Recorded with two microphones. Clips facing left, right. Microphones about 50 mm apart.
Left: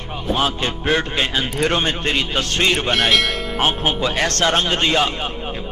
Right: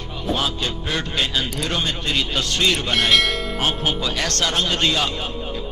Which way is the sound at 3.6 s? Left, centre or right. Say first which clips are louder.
Left 5 dB; left.